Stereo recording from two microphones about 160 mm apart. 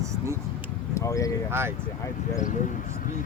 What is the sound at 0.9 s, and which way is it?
Speech, 20° left (ahead or behind).